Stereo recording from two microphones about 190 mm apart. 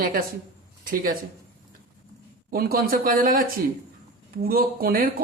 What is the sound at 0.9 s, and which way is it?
Speech, 50° right (ahead or behind).